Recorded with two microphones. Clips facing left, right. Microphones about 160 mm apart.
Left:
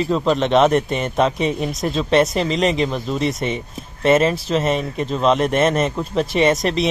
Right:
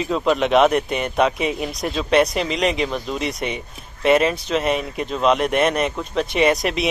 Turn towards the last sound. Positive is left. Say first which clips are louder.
# left 2 dB
turn(degrees=0)  # may be behind; listen again after turning